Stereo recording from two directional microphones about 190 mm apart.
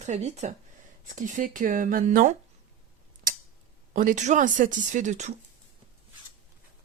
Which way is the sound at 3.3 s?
45° right (ahead or behind).